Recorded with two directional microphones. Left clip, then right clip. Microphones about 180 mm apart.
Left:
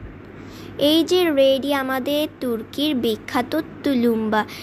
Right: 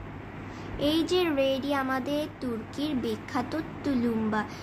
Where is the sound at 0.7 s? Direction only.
40° left (ahead or behind).